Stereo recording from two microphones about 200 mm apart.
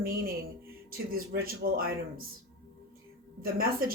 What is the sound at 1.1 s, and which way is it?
Speech, 45° right (ahead or behind).